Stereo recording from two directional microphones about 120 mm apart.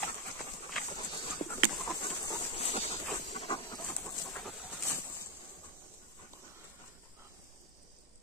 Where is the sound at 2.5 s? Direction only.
55° left (ahead or behind).